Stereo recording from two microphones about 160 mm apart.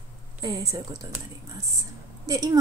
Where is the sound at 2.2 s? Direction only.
20° right (ahead or behind).